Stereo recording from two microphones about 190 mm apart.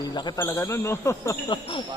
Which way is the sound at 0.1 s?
25° left (ahead or behind).